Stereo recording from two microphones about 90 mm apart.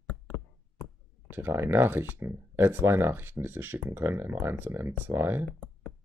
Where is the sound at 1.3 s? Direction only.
25° right (ahead or behind).